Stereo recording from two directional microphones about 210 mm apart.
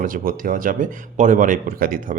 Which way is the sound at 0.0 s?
40° right (ahead or behind).